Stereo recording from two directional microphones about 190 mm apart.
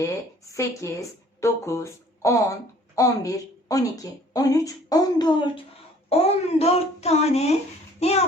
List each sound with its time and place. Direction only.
0.5 s a woman's voice: 15° left (ahead or behind)
6.1 s a child's voice: 30° left (ahead or behind)